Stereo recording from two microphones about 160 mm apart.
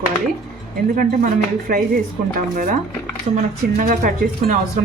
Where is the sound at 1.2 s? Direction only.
60° right (ahead or behind).